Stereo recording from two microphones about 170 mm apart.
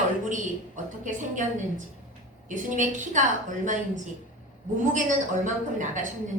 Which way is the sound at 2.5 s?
45° right (ahead or behind).